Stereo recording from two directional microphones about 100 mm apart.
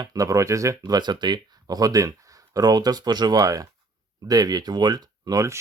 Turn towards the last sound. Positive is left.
turn(degrees=-30)  # may be behind; listen again after turning